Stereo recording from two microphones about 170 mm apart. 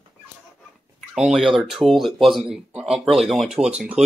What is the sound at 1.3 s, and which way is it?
Speech, 5° right (ahead or behind).